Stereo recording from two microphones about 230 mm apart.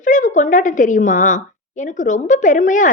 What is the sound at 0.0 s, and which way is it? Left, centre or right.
A woman's voice, left.